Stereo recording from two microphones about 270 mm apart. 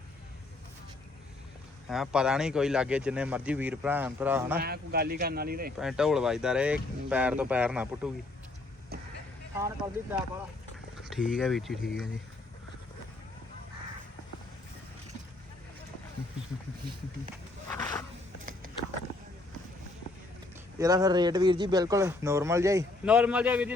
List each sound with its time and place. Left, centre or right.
1.9 s speech: centre
4.6 s speech: right
5.8 s speech: centre
9.6 s speech: centre
17.7 s a sound: centre
20.7 s speech: centre